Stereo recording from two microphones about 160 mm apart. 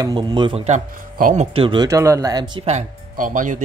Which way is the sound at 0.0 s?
30° right (ahead or behind).